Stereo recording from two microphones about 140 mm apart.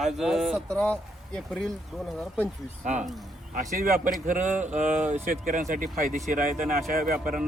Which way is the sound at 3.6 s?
70° right (ahead or behind).